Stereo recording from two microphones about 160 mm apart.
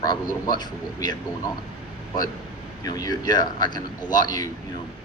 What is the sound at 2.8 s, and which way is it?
Speech, 25° left (ahead or behind).